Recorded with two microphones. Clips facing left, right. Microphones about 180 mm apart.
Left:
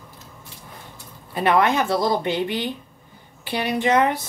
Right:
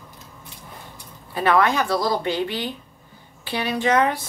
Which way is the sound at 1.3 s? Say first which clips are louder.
Even; 20° left (ahead or behind).